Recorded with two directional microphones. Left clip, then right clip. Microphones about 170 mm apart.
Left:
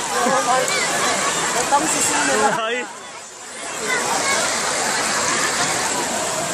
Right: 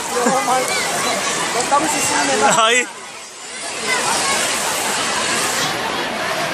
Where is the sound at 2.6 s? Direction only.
25° right (ahead or behind).